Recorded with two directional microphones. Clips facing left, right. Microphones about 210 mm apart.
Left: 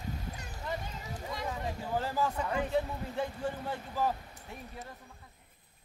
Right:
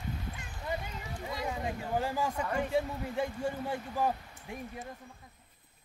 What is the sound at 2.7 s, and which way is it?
Speech, 10° right (ahead or behind).